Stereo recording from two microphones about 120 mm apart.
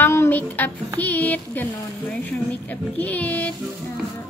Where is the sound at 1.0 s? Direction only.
15° left (ahead or behind).